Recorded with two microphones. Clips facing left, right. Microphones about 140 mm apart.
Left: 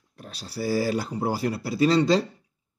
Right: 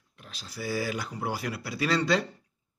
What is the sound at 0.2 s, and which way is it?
A man's voice, 35° left (ahead or behind).